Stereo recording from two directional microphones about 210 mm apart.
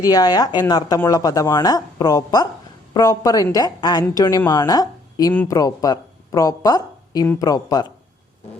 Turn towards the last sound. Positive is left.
turn(degrees=20)  # may be behind; listen again after turning